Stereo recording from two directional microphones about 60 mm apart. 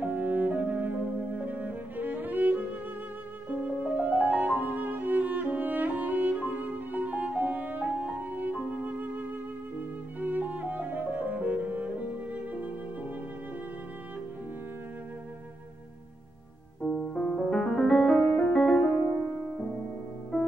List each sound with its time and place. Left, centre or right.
0.0 s music: right
16.8 s music: centre